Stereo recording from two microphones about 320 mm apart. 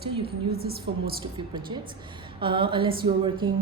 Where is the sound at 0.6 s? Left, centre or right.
Right.